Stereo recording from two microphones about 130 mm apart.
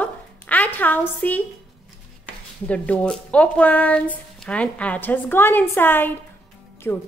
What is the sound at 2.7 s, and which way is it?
Speech, 10° left (ahead or behind).